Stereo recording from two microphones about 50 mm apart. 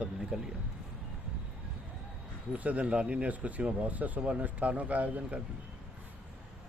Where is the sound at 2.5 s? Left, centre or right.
Right.